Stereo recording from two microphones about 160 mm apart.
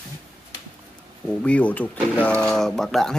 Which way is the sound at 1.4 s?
10° left (ahead or behind).